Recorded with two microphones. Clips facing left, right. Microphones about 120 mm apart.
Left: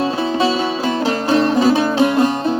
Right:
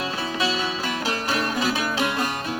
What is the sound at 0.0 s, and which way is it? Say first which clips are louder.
Music: left 9 dB; 30° left (ahead or behind).